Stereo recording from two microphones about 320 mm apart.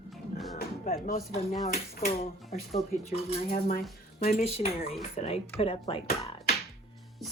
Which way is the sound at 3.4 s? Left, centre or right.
Left.